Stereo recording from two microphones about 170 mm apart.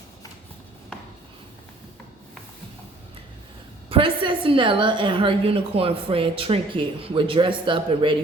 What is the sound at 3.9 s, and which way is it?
A woman's voice, 30° right (ahead or behind).